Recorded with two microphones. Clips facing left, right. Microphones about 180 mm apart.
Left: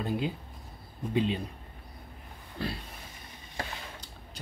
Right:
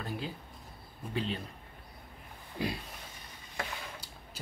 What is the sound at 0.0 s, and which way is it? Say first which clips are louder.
A man's voice: left 7 dB; 20° left (ahead or behind).